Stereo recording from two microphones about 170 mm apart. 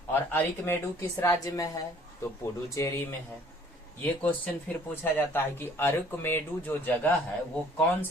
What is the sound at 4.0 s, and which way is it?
Speech, 10° left (ahead or behind).